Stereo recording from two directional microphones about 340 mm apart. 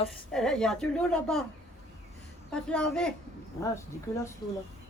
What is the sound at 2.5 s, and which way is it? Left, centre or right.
Speech, centre.